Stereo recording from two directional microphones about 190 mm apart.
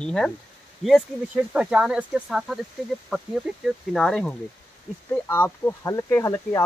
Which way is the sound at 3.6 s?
Centre (ahead or behind).